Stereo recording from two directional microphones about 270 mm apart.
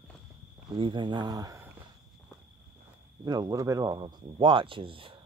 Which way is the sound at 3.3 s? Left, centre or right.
Centre.